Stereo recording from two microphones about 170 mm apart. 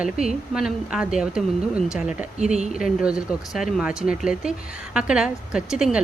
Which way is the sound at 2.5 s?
40° right (ahead or behind).